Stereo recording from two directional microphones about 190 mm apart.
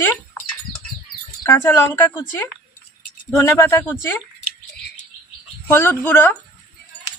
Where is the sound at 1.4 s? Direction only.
15° left (ahead or behind).